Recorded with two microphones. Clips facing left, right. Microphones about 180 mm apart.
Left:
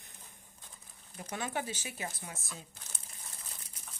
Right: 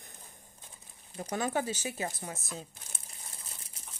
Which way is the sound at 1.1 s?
35° right (ahead or behind).